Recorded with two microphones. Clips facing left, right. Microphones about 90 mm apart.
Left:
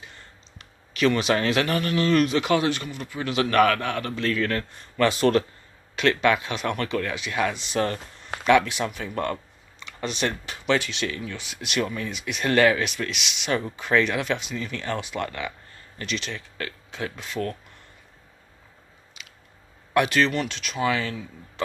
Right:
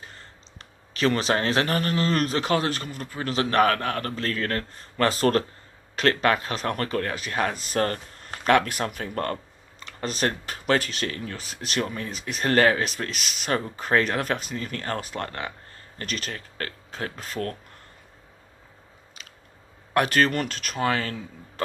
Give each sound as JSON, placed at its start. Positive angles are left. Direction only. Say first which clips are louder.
{"t": 0.0, "sound": "speech", "louder": "right 1 dB", "side_deg": -35}
{"t": 19.2, "sound": "biting", "louder": "left 1 dB", "side_deg": -40}
{"t": 19.9, "sound": "speech", "louder": "even", "side_deg": -45}